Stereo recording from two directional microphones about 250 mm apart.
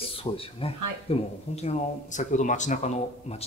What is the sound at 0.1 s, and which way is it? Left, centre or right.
A man's voice, left.